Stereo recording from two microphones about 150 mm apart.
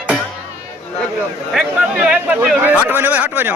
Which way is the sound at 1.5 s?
5° right (ahead or behind).